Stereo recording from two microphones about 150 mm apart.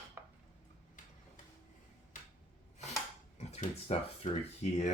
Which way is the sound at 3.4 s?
45° left (ahead or behind).